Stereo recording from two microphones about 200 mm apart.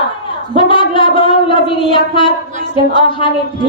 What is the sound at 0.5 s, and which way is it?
A woman's voice, 25° left (ahead or behind).